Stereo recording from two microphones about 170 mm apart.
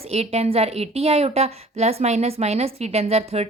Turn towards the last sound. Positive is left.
turn(degrees=-35)  # may be behind; listen again after turning